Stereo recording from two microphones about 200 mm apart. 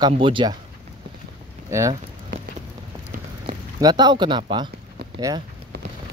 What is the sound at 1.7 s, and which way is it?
Speech, 15° right (ahead or behind).